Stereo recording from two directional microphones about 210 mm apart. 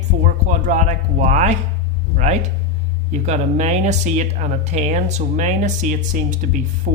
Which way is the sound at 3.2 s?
35° right (ahead or behind).